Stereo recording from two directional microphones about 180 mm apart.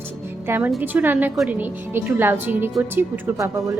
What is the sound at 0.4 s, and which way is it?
A woman's voice, 10° right (ahead or behind).